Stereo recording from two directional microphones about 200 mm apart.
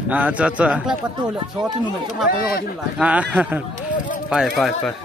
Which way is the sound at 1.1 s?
20° right (ahead or behind).